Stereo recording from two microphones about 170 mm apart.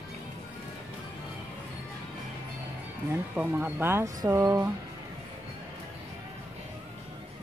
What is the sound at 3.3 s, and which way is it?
Speech, 10° right (ahead or behind).